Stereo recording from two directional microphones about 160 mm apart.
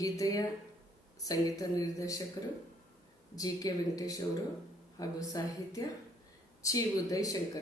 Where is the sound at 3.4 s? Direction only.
25° left (ahead or behind).